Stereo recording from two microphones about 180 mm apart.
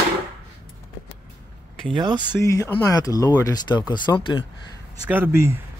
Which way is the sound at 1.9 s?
25° right (ahead or behind).